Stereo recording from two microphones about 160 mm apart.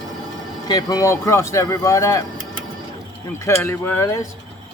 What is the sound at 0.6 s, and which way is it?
Speech, 25° left (ahead or behind).